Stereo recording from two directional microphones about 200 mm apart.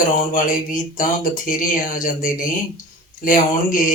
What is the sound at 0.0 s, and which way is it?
Speech, 40° left (ahead or behind).